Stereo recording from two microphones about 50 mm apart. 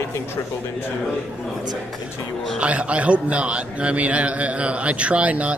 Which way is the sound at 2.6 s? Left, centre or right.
Right.